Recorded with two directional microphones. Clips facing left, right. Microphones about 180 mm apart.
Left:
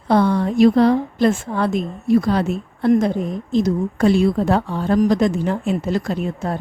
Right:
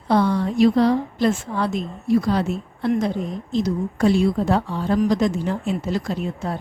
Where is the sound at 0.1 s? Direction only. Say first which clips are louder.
Left 3 dB; 55° left (ahead or behind).